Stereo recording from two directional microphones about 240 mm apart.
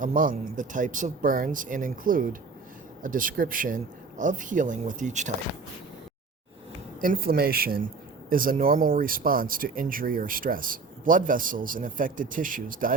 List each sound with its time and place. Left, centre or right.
0.0 s speech: right
7.0 s speech: right